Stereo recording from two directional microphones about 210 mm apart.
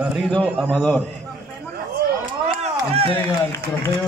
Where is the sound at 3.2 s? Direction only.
10° left (ahead or behind).